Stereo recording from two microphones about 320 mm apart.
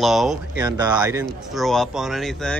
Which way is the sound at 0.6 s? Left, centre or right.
Centre.